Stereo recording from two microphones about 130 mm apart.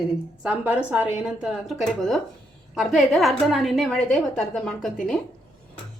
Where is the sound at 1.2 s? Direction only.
Centre (ahead or behind).